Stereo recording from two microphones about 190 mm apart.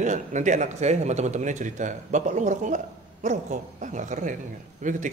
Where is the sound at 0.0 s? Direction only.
40° right (ahead or behind).